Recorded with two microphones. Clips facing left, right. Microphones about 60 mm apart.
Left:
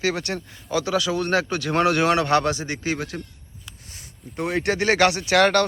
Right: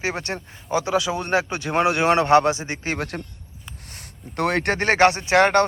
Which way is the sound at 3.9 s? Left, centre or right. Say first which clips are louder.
Right 2 dB; right.